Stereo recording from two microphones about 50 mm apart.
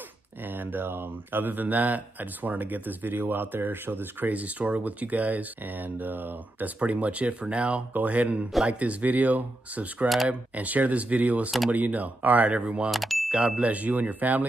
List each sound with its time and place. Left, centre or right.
0.4 s speech: right
4.3 s speech: right
6.8 s speech: right
12.9 s speech: centre
13.6 s speech: right